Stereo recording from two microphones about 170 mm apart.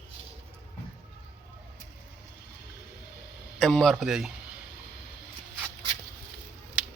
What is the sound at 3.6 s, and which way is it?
Speech, centre (ahead or behind).